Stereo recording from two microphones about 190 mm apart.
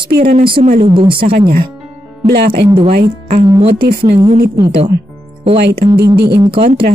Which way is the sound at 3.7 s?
55° right (ahead or behind).